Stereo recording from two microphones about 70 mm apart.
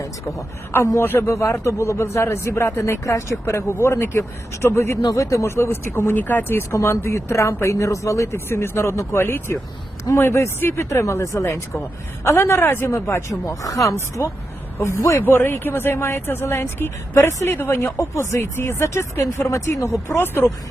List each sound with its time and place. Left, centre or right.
0.9 s speech: left
1.4 s speech: left
5.0 s speech: left
8.4 s speech: left
14.8 s speech: left